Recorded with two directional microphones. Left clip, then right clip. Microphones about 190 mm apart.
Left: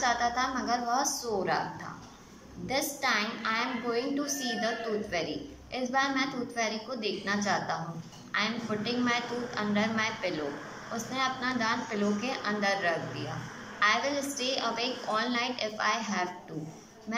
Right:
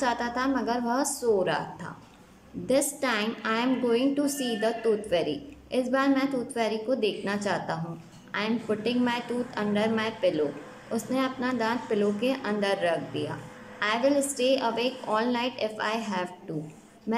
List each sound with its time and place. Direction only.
0.0 s a woman's voice: 45° right (ahead or behind)
2.7 s a woman's voice: 45° right (ahead or behind)
5.7 s a woman's voice: 40° right (ahead or behind)